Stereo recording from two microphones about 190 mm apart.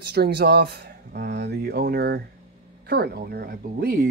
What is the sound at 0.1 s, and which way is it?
Speech, 60° right (ahead or behind).